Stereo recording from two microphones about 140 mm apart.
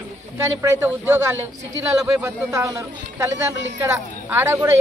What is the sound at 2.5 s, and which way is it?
A woman's voice, 20° right (ahead or behind).